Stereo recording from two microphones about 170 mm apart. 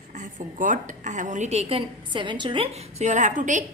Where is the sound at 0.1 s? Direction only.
50° right (ahead or behind).